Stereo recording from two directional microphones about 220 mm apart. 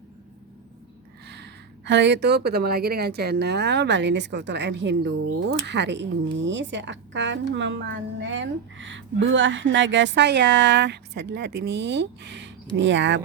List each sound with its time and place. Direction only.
1.3 s speech: 50° right (ahead or behind)